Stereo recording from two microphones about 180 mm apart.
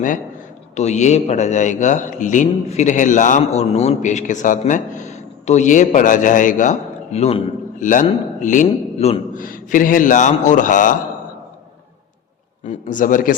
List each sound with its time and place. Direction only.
0.8 s a man's voice: 40° left (ahead or behind)
9.4 s a man's voice: 50° left (ahead or behind)
12.6 s a man's voice: 45° left (ahead or behind)